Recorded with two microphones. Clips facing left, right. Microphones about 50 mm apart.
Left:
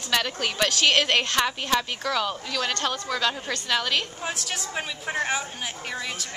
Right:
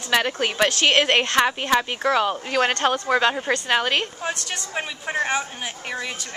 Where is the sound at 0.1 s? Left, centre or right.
Right.